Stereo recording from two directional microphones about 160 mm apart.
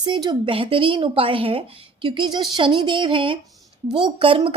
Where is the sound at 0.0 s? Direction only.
25° right (ahead or behind).